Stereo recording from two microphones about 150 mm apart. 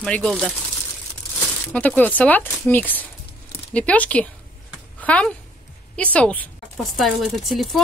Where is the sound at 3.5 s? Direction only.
10° left (ahead or behind).